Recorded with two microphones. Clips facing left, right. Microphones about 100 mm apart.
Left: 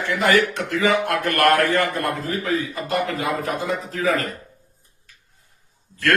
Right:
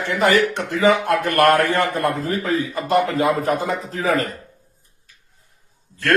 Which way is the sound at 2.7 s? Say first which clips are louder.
Right 5 dB; 35° right (ahead or behind).